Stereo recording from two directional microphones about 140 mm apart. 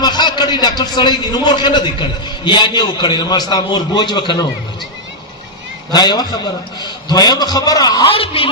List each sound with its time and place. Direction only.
0.0 s a man's voice: 30° left (ahead or behind)
5.9 s a man's voice: 30° left (ahead or behind)
8.1 s a man's voice: 40° left (ahead or behind)